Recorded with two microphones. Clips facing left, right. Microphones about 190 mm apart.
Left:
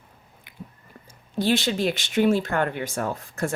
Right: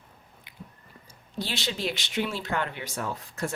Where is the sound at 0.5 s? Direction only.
50° left (ahead or behind).